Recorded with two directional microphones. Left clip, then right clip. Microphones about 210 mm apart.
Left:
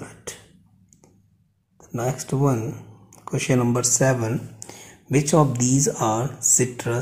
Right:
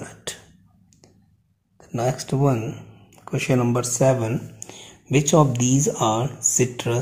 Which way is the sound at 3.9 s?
5° left (ahead or behind).